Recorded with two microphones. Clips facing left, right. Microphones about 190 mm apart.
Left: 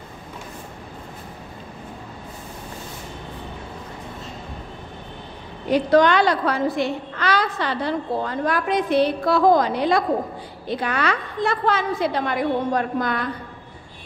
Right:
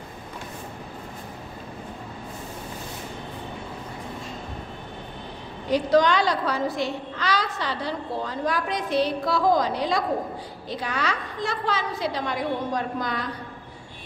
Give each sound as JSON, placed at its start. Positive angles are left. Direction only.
{"t": 5.7, "sound": "a woman's voice", "side_deg": 60}